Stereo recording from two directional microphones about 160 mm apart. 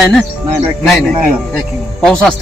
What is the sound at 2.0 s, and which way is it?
Speech, 5° left (ahead or behind).